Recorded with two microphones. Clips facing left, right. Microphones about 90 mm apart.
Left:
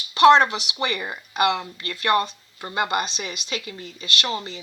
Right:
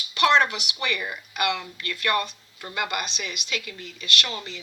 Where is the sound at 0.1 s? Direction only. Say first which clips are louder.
Left 6 dB; 35° left (ahead or behind).